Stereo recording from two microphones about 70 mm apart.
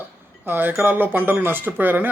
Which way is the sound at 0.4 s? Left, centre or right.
Right.